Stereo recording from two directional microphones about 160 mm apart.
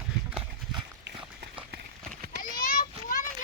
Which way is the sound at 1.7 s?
90° right.